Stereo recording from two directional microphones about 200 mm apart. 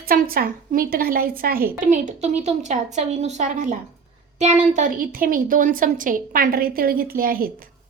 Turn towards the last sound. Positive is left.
turn(degrees=-45)  # may be behind; listen again after turning